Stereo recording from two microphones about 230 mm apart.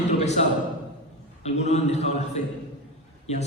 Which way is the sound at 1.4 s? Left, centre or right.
Left.